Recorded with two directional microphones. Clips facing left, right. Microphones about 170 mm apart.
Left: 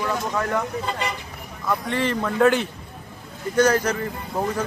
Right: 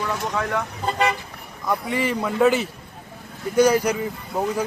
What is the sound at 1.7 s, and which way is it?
Speech, 10° right (ahead or behind).